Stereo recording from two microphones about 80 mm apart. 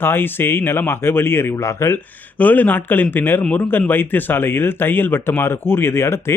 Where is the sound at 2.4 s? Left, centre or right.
Left.